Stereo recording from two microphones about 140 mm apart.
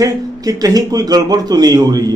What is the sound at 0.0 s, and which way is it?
A man's voice, 25° right (ahead or behind).